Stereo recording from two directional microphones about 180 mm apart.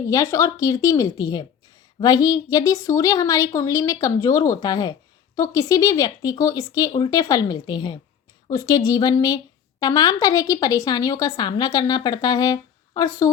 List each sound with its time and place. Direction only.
0.1 s a woman's voice: 20° left (ahead or behind)